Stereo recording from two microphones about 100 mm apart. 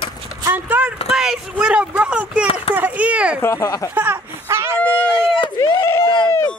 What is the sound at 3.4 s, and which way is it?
Speech, 30° left (ahead or behind).